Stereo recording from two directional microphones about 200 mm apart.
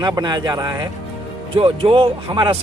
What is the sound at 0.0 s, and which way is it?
A man's voice, 20° right (ahead or behind).